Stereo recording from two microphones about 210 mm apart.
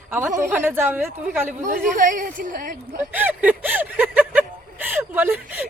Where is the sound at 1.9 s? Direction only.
40° right (ahead or behind).